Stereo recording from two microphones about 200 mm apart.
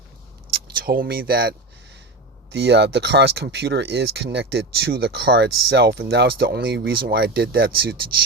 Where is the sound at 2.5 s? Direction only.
55° right (ahead or behind).